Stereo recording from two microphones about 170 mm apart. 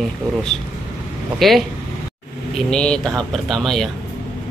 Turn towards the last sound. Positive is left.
turn(degrees=0)  # may be behind; listen again after turning